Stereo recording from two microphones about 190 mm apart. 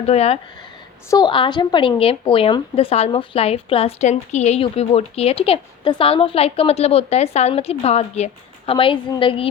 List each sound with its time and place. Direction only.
0.0 s speech: 35° left (ahead or behind)